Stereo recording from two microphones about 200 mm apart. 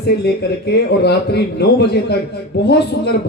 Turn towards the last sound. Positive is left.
turn(degrees=55)  # may be behind; listen again after turning